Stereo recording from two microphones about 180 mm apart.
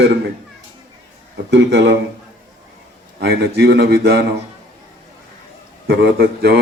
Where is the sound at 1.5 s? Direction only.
75° right (ahead or behind).